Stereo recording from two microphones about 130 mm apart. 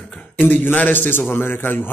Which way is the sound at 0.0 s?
10° left (ahead or behind).